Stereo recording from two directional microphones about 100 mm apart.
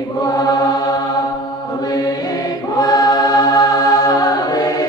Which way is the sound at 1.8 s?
40° left (ahead or behind).